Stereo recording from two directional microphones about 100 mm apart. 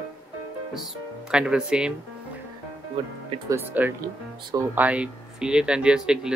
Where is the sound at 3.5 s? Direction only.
20° right (ahead or behind).